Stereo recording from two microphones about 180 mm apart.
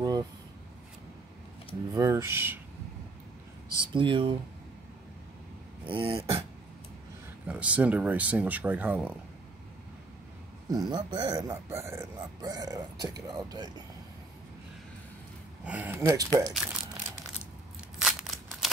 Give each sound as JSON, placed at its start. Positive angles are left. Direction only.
{"t": 0.0, "sound": "a sound", "side_deg": -20}
{"t": 2.0, "sound": "speech", "side_deg": -15}
{"t": 3.7, "sound": "speech", "side_deg": -25}
{"t": 5.9, "sound": "speech", "side_deg": -30}
{"t": 7.4, "sound": "speech", "side_deg": -5}
{"t": 10.7, "sound": "speech", "side_deg": -20}
{"t": 15.6, "sound": "speech", "side_deg": -10}
{"t": 17.9, "sound": "scissors", "side_deg": 0}